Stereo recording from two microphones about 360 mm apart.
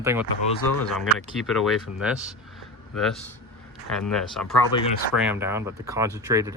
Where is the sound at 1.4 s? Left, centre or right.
Centre.